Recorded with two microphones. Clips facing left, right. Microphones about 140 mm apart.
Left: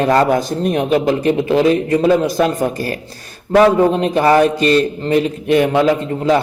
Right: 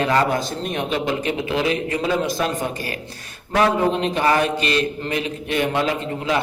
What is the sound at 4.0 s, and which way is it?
A man's voice, 40° left (ahead or behind).